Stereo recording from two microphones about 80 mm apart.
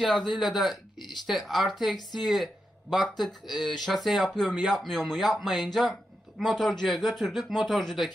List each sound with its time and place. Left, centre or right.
0.0 s speech: centre